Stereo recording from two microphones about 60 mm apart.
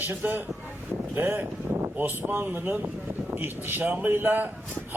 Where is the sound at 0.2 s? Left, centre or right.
Right.